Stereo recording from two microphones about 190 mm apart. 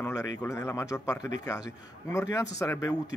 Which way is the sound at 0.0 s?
15° left (ahead or behind).